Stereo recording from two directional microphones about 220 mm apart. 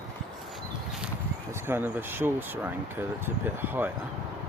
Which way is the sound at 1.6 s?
10° right (ahead or behind).